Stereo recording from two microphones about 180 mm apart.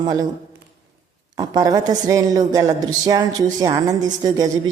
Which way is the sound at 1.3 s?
25° right (ahead or behind).